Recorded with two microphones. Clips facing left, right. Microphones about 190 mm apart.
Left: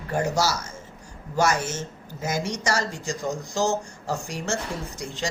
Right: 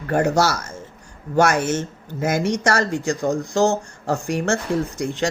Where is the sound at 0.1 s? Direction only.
60° right (ahead or behind).